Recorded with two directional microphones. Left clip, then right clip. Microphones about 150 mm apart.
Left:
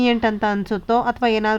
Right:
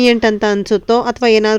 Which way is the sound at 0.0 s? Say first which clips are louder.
Right 7 dB; 35° right (ahead or behind).